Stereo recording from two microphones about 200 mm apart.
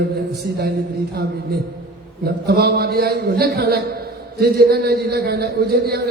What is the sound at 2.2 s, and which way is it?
A man's voice, 50° right (ahead or behind).